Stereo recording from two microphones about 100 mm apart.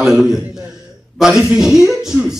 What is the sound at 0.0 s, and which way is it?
A man's voice, centre (ahead or behind).